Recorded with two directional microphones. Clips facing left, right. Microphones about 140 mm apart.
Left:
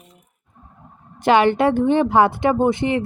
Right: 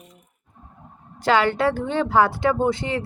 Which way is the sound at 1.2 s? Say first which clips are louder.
Left 4 dB; 20° left (ahead or behind).